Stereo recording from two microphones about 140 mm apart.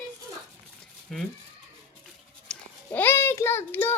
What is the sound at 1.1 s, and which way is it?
Speech, 5° left (ahead or behind).